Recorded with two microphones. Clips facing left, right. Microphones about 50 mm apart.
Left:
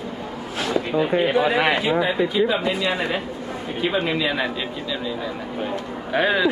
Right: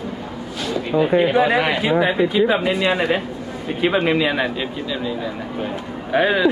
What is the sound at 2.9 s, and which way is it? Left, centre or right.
Speech, right.